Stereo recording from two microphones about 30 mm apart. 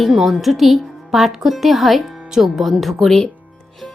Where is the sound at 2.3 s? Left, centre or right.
Centre.